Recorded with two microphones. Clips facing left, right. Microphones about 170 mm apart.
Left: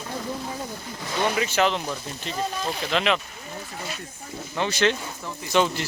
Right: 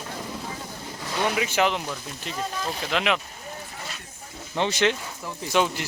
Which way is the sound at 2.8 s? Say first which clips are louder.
Left 1 dB; 10° right (ahead or behind).